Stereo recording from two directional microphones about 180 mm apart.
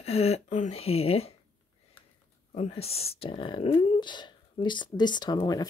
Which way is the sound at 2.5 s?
35° left (ahead or behind).